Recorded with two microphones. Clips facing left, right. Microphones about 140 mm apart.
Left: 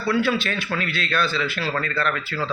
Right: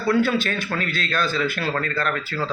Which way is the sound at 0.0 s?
45° right (ahead or behind).